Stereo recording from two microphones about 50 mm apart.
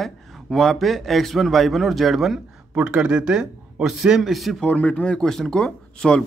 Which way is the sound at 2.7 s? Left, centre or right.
Right.